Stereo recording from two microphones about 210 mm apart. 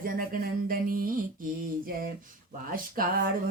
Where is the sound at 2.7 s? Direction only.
40° right (ahead or behind).